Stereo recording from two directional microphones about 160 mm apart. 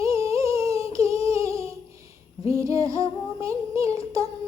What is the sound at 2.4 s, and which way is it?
Female singing, 20° right (ahead or behind).